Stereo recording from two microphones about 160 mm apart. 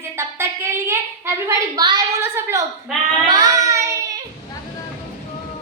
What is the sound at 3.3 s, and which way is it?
Child singing, 25° right (ahead or behind).